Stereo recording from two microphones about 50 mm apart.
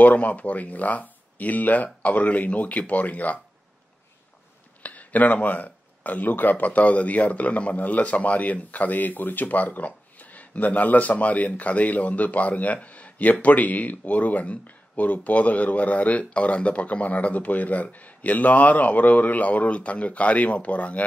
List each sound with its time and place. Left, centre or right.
0.0 s speech: left
4.8 s a man's voice: left